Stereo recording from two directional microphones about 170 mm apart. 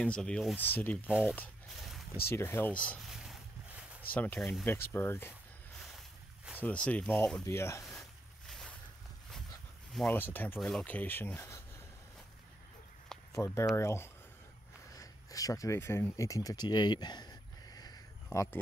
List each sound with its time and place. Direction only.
0.0 s speech: 5° left (ahead or behind)
1.0 s speech: 5° right (ahead or behind)
1.7 s a sound: centre (ahead or behind)
2.2 s a sound: 15° left (ahead or behind); by 4.0 s 5° right (ahead or behind)
4.1 s speech: 10° left (ahead or behind)
5.8 s boat: centre (ahead or behind)
6.6 s speech: 10° left (ahead or behind)
7.4 s speech: 15° left (ahead or behind)
7.8 s vehicle: centre (ahead or behind)
10.0 s speech: 10° left (ahead or behind)
13.3 s speech: 15° left (ahead or behind)
14.9 s a sound: 20° left (ahead or behind)